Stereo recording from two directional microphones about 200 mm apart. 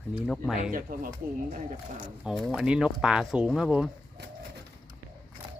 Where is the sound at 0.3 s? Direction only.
Centre (ahead or behind).